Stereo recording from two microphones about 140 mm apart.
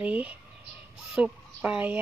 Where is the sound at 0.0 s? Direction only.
10° right (ahead or behind).